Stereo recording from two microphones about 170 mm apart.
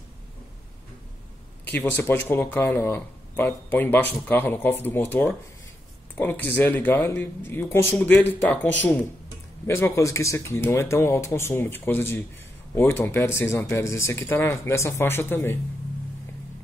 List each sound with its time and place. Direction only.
1.6 s a man's voice: 10° left (ahead or behind)
9.7 s speech: 15° left (ahead or behind)